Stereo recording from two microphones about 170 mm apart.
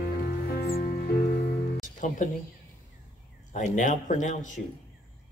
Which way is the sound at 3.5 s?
45° left (ahead or behind).